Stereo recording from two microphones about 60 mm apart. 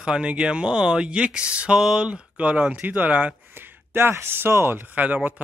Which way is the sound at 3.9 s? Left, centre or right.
Right.